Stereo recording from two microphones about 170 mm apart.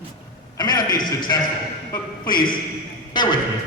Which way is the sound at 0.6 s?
25° left (ahead or behind).